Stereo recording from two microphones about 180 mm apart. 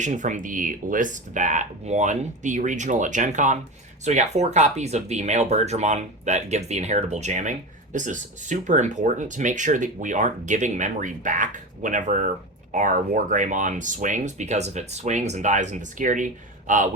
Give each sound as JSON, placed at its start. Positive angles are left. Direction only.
{"t": 0.0, "sound": "speech", "side_deg": -45}